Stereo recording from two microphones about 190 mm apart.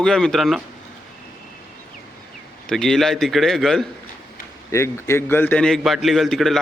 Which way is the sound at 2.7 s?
Centre (ahead or behind).